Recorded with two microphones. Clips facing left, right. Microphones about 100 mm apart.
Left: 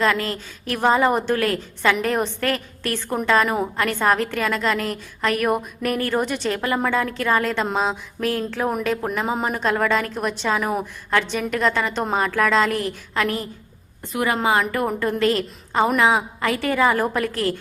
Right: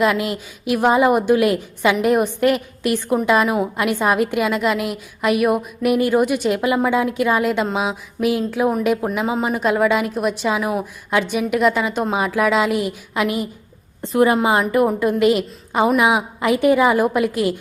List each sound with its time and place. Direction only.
0.0 s a woman's voice: 15° right (ahead or behind)
14.0 s a woman's voice: 25° right (ahead or behind)